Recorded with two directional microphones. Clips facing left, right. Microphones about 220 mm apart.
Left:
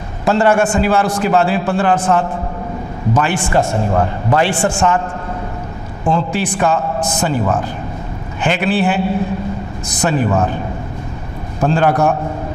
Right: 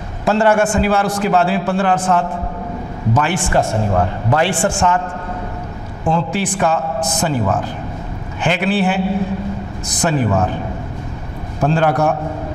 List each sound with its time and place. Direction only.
0.2 s a man's voice: 15° left (ahead or behind)
6.0 s a man's voice: 15° left (ahead or behind)
8.4 s a man's voice: 15° left (ahead or behind)
10.0 s a man's voice: 20° left (ahead or behind)
11.6 s a man's voice: 20° left (ahead or behind)